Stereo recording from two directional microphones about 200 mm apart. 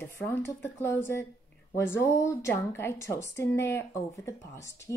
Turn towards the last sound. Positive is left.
turn(degrees=15)  # may be behind; listen again after turning